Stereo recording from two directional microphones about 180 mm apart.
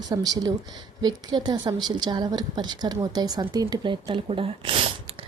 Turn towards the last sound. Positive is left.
turn(degrees=-30)  # may be behind; listen again after turning